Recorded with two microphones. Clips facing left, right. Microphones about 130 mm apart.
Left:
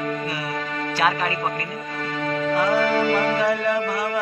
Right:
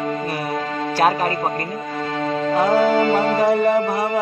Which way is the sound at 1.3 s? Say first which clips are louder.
Right 4 dB; 30° right (ahead or behind).